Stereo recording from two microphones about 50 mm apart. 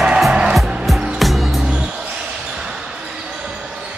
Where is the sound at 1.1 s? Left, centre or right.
Centre.